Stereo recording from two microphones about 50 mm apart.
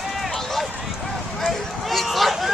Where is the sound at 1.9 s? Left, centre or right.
Centre.